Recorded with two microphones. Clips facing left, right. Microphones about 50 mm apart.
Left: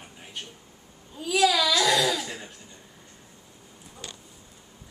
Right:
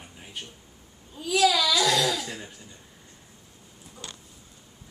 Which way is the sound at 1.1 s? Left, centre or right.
Centre.